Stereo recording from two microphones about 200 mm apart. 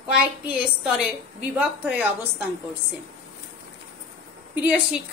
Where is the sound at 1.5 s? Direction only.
5° right (ahead or behind).